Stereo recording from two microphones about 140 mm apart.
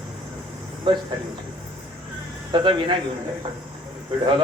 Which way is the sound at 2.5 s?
35° right (ahead or behind).